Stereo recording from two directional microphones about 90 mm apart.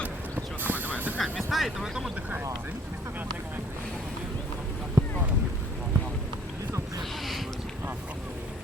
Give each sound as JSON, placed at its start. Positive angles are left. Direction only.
{"t": 0.6, "sound": "a sound", "side_deg": -20}
{"t": 1.2, "sound": "speech", "side_deg": 0}
{"t": 5.0, "sound": "boat", "side_deg": -40}